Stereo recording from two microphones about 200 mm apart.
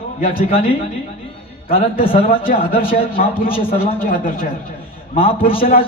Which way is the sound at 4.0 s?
45° left (ahead or behind).